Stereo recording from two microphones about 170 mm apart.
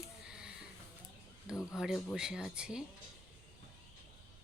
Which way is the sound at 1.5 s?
20° left (ahead or behind).